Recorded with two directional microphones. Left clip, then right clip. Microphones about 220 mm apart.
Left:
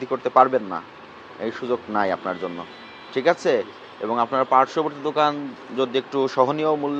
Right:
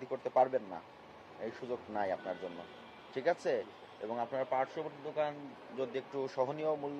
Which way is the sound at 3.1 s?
35° left (ahead or behind).